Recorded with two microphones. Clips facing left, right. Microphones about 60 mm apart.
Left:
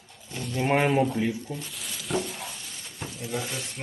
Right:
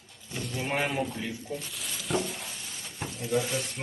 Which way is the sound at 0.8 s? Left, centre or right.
Centre.